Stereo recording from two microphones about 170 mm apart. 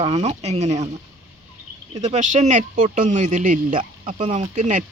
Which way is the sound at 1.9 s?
40° right (ahead or behind).